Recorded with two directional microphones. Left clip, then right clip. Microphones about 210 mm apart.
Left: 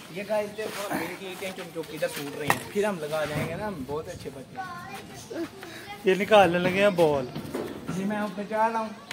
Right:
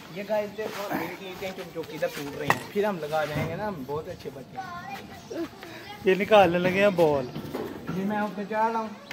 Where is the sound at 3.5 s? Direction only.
20° right (ahead or behind).